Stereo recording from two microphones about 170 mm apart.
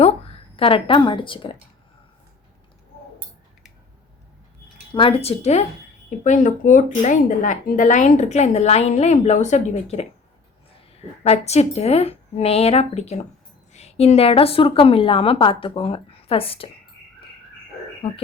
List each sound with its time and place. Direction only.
0.0 s a woman's voice: 35° left (ahead or behind)
4.9 s a woman's voice: 30° left (ahead or behind)
11.2 s a woman's voice: 40° left (ahead or behind)
18.0 s a woman's voice: 30° left (ahead or behind)